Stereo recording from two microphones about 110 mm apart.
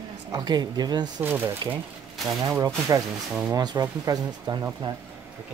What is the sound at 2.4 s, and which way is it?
Speech, 30° right (ahead or behind).